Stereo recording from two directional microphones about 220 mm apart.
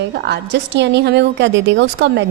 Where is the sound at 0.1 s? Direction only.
50° right (ahead or behind).